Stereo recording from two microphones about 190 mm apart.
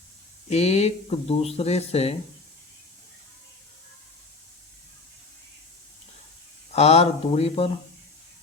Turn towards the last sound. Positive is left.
turn(degrees=30)  # may be behind; listen again after turning